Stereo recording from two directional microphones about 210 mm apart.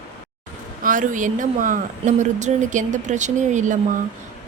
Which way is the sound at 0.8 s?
40° right (ahead or behind).